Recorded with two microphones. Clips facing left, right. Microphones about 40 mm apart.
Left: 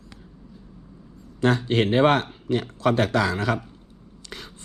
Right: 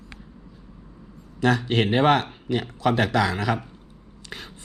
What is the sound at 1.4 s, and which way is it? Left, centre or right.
Speech, right.